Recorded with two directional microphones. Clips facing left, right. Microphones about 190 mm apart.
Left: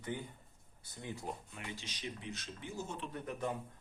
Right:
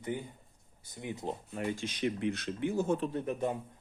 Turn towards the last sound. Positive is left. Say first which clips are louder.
# right 7 dB
turn(degrees=-25)  # may be behind; listen again after turning